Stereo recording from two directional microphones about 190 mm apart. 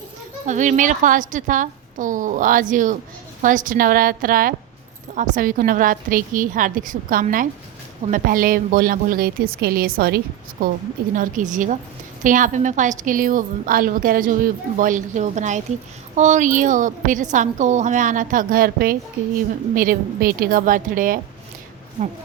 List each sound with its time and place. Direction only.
0.4 s a woman's voice: 40° right (ahead or behind)